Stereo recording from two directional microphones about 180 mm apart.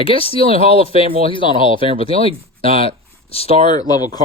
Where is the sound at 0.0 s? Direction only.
30° left (ahead or behind).